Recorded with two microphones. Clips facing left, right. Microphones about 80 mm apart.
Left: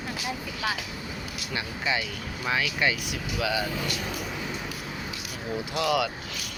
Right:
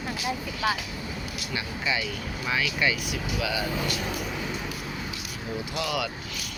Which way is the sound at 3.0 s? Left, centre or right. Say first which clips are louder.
Even; left.